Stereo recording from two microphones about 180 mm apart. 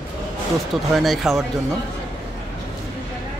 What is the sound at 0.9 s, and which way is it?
Speech, centre (ahead or behind).